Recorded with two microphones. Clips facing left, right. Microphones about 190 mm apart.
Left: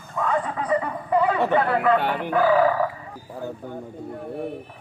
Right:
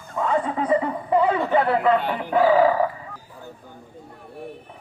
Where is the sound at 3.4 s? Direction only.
60° left (ahead or behind).